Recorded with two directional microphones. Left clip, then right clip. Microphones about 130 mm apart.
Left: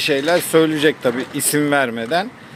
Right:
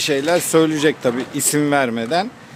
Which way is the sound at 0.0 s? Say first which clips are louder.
Left 1 dB; 40° right (ahead or behind).